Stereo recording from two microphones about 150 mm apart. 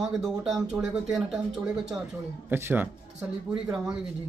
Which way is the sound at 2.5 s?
15° right (ahead or behind).